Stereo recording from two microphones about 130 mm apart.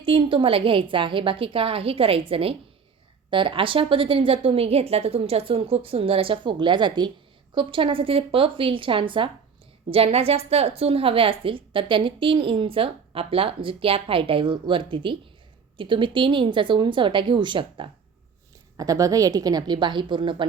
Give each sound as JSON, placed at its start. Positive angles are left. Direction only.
{"t": 0.0, "sound": "a woman's voice", "side_deg": -45}
{"t": 18.8, "sound": "a woman's voice", "side_deg": -30}